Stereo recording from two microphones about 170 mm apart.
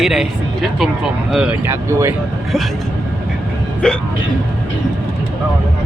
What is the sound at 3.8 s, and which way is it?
Speech, 5° left (ahead or behind).